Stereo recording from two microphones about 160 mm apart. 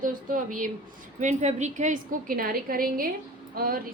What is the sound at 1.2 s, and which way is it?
A woman's voice, 50° right (ahead or behind).